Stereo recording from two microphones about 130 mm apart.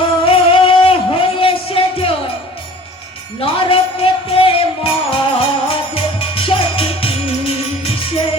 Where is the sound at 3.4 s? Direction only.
45° left (ahead or behind).